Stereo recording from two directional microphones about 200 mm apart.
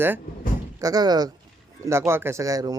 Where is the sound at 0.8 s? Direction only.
20° right (ahead or behind).